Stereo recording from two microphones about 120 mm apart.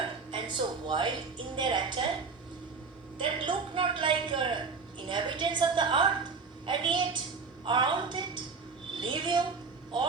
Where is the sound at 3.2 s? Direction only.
40° right (ahead or behind).